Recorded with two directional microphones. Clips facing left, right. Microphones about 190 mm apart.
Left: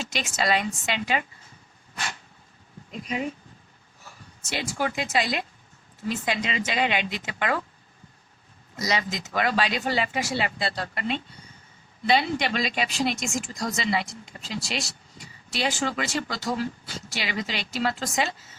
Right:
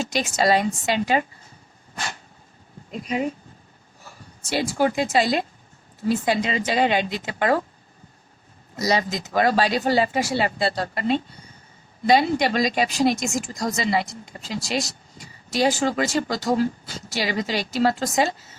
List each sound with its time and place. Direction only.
0.0 s a woman's voice: 40° right (ahead or behind)
2.9 s a woman's voice: 35° right (ahead or behind)
4.4 s a woman's voice: 35° right (ahead or behind)
8.7 s a woman's voice: 35° right (ahead or behind)